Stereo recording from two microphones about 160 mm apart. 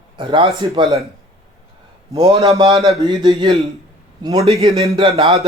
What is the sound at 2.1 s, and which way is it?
Speech, 25° right (ahead or behind).